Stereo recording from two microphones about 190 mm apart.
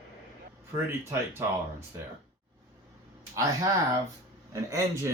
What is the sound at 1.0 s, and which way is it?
Speech, 15° right (ahead or behind).